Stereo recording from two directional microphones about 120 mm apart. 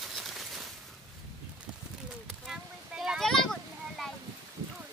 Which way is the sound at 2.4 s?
5° right (ahead or behind).